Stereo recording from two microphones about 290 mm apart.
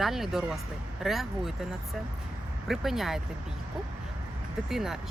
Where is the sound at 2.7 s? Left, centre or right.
Centre.